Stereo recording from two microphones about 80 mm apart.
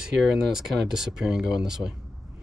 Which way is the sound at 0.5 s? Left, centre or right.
Centre.